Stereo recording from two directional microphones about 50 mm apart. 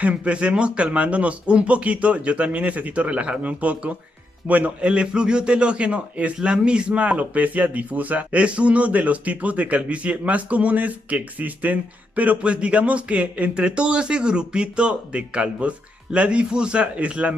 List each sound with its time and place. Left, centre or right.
0.0 s speech: right